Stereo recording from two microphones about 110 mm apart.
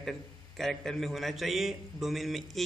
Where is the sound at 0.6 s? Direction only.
5° left (ahead or behind).